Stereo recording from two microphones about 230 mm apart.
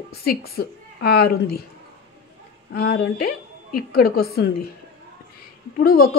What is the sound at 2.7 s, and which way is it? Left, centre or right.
Speech, left.